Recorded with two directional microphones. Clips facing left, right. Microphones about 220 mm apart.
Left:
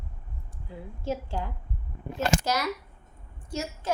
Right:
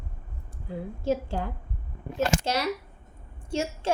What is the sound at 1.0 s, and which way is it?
Speech, 50° right (ahead or behind).